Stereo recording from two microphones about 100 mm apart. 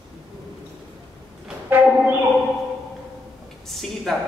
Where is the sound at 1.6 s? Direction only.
15° right (ahead or behind).